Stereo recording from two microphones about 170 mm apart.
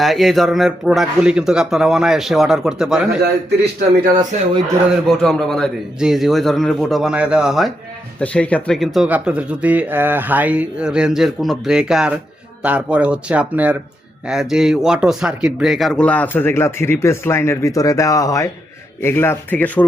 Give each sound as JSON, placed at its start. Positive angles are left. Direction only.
{"t": 0.0, "sound": "speech", "side_deg": 0}
{"t": 4.3, "sound": "a man's voice", "side_deg": -45}
{"t": 5.0, "sound": "speech", "side_deg": 0}